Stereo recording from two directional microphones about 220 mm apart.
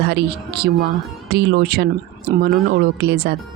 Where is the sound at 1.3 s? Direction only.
45° right (ahead or behind).